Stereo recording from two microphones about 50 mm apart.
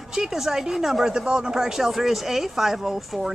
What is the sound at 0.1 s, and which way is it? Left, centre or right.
Speech, centre.